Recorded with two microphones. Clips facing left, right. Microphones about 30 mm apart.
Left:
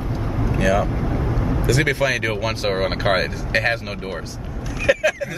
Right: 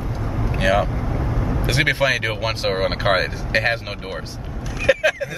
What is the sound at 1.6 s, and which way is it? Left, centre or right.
Speech, right.